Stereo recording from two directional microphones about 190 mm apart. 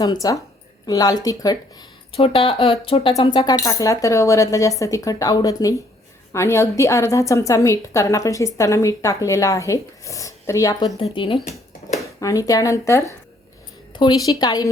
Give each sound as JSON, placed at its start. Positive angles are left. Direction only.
{"t": 0.0, "sound": "speech", "side_deg": 20}
{"t": 2.1, "sound": "speech", "side_deg": 30}